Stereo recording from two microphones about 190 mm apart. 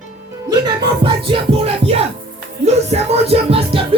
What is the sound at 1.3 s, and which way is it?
Music, 30° right (ahead or behind).